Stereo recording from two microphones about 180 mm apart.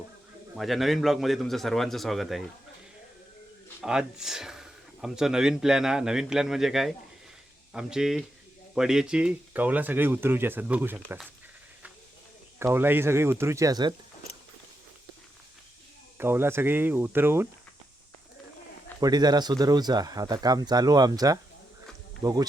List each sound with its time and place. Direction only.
0.5 s speech: centre (ahead or behind)
3.8 s speech: 5° right (ahead or behind)
12.5 s speech: 15° right (ahead or behind)
16.1 s speech: 10° right (ahead or behind)
18.9 s speech: 20° right (ahead or behind)